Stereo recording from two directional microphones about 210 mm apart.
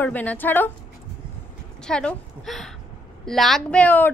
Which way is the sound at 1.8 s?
5° left (ahead or behind).